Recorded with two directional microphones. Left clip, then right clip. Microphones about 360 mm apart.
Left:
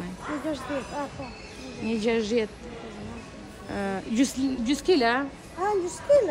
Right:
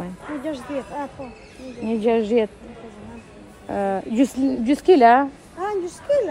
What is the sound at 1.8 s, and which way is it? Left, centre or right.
Speech, centre.